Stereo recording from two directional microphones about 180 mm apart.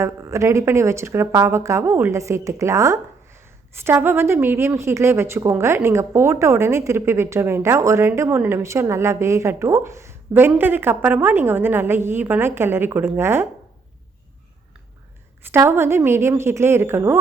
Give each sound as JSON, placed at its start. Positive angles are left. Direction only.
{"t": 0.0, "sound": "a woman's voice", "side_deg": -15}
{"t": 15.5, "sound": "a woman's voice", "side_deg": -15}